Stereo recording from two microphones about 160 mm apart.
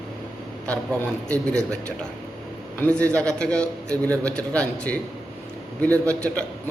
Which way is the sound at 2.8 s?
10° left (ahead or behind).